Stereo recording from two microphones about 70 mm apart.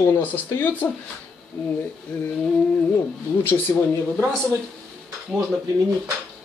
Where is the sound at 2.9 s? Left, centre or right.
Left.